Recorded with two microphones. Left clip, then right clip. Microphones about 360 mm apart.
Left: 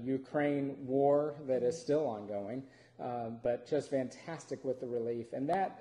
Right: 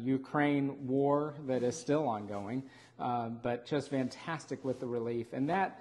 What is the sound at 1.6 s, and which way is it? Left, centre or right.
Speech, right.